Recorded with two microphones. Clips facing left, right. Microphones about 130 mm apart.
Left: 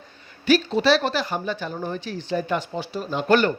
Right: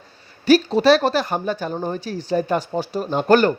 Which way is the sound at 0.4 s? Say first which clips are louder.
Right 4 dB; 40° right (ahead or behind).